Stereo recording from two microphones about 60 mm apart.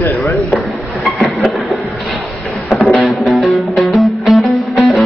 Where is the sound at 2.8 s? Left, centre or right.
Centre.